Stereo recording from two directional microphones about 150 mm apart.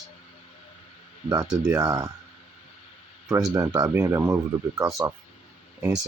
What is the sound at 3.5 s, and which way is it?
Speech, 25° right (ahead or behind).